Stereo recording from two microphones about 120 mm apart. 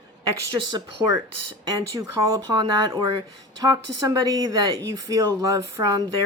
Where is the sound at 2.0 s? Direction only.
30° right (ahead or behind).